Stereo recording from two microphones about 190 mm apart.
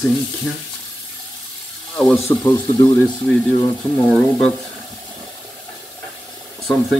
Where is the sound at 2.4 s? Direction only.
15° left (ahead or behind).